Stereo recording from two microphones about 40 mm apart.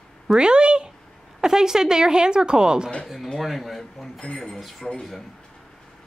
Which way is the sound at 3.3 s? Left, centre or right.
Centre.